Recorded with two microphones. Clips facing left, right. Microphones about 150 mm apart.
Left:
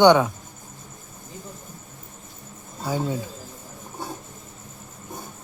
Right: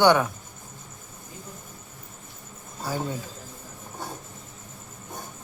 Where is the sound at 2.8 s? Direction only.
15° left (ahead or behind).